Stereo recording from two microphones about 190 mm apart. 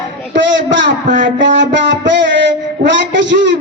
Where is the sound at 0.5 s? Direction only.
70° right (ahead or behind).